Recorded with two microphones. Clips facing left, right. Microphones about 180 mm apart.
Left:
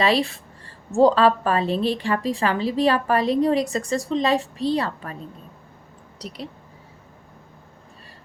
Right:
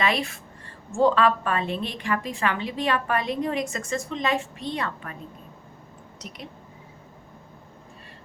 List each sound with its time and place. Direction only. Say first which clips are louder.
0.0 s a woman's voice: left 5 dB; 30° left (ahead or behind)
6.1 s a woman's voice: left 6 dB; 35° left (ahead or behind)